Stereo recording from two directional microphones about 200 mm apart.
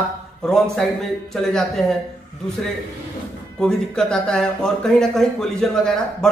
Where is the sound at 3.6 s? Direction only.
5° left (ahead or behind).